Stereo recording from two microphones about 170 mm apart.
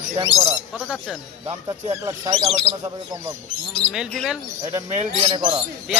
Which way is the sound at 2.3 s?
30° right (ahead or behind).